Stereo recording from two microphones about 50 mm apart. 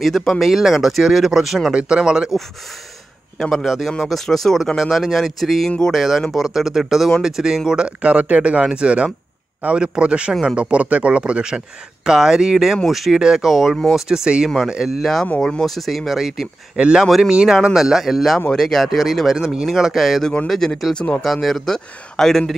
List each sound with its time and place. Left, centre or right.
0.0 s speech: centre
0.4 s speech: centre
1.7 s speech: centre
3.5 s speech: centre
15.6 s speech: centre
16.7 s speech: centre
17.6 s speech: centre
20.9 s speech: centre
21.2 s speech: centre